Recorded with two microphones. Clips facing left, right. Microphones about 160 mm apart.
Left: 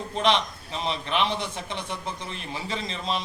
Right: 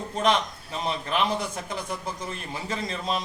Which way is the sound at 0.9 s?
5° right (ahead or behind).